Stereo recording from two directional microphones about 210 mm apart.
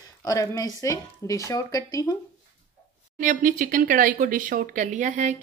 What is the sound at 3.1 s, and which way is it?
Speech, 40° right (ahead or behind).